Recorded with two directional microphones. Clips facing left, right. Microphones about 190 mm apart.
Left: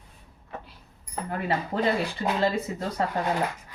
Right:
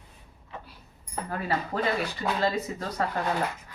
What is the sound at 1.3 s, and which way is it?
Speech, 25° left (ahead or behind).